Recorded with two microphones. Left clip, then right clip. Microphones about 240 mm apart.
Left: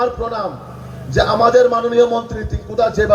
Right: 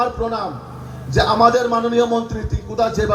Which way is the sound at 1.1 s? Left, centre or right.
Right.